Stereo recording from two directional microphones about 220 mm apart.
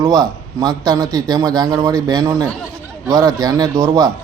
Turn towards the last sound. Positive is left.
turn(degrees=-20)  # may be behind; listen again after turning